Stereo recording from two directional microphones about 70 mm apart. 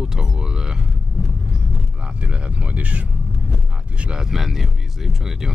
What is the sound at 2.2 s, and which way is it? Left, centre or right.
Speech, centre.